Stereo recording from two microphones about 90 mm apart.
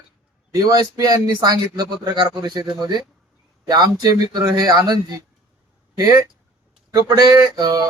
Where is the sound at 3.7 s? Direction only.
50° right (ahead or behind).